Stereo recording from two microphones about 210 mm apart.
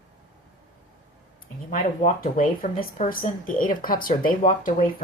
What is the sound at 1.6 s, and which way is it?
Speech, 40° left (ahead or behind).